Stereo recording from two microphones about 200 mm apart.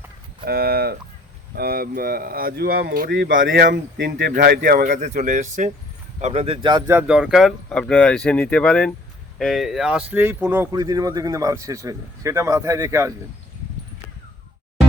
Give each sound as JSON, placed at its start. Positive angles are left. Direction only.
{"t": 0.4, "sound": "speech", "side_deg": -50}
{"t": 3.4, "sound": "speech", "side_deg": -50}